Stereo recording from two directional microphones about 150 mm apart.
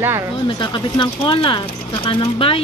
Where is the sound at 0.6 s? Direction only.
30° left (ahead or behind).